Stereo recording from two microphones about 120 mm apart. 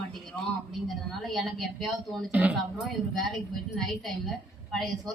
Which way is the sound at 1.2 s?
Centre (ahead or behind).